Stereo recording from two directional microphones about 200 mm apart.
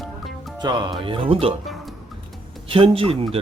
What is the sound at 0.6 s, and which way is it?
Speech, 20° right (ahead or behind).